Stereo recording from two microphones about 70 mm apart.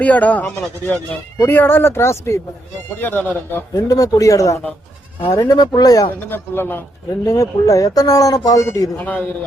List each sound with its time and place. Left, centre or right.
0.0 s speech: left
3.0 s speech: left
3.8 s speech: left
5.3 s speech: left
6.1 s speech: left
7.3 s speech: left
9.0 s speech: left